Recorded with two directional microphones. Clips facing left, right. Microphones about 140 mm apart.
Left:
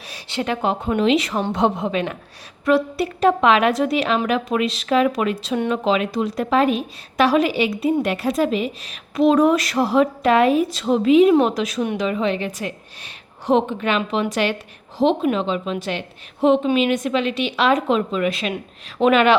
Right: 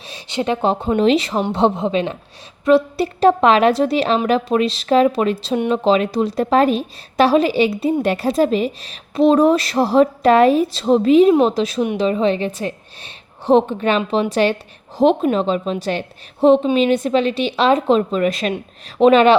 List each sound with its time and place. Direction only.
0.0 s a woman's voice: 20° right (ahead or behind)
5.5 s a woman's voice: 20° right (ahead or behind)
5.8 s a woman's voice: 35° right (ahead or behind)
18.5 s a woman's voice: 30° right (ahead or behind)